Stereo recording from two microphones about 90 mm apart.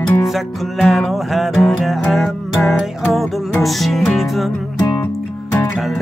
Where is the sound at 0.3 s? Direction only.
Centre (ahead or behind).